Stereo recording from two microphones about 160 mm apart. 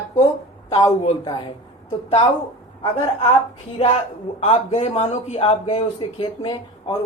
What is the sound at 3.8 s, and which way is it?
Speech, 35° left (ahead or behind).